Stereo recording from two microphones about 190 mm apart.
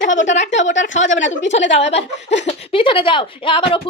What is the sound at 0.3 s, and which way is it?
A woman's voice, 40° left (ahead or behind).